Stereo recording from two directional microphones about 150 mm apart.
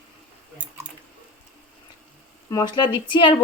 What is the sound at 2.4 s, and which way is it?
Speech, 25° left (ahead or behind).